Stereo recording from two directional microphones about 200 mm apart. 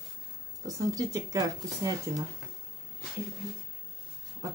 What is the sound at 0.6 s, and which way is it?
Speech, 15° right (ahead or behind).